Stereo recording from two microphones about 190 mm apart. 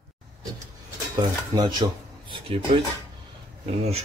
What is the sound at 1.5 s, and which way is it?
Speech, 20° right (ahead or behind).